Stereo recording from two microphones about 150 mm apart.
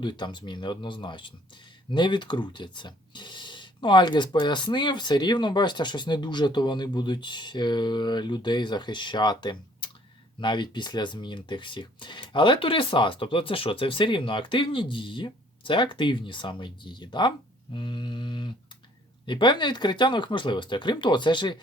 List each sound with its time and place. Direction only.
0.0 s speech: 30° left (ahead or behind)